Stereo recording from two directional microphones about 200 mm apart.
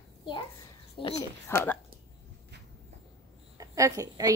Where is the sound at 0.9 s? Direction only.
25° left (ahead or behind).